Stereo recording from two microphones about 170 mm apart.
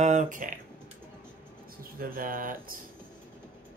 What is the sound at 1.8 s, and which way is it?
Speech, 60° right (ahead or behind).